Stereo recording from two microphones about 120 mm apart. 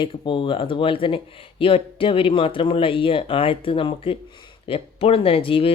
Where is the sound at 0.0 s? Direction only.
45° left (ahead or behind).